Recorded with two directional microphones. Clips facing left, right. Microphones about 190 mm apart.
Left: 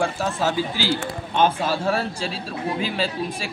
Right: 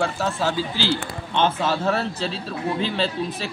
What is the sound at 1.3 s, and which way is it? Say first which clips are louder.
Speech: left 1 dB; 10° left (ahead or behind).